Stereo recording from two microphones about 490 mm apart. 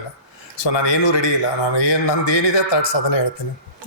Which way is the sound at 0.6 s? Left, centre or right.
Left.